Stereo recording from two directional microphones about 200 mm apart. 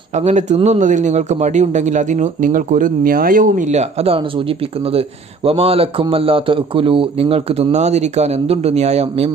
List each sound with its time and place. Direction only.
0.1 s a man's voice: 35° right (ahead or behind)